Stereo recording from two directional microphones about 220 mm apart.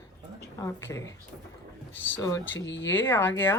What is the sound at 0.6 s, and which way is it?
Speech, 15° left (ahead or behind).